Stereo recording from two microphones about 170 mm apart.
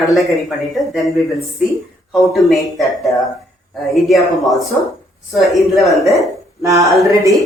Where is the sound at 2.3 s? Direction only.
Centre (ahead or behind).